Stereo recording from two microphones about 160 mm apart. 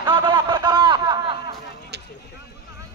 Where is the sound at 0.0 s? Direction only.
30° right (ahead or behind).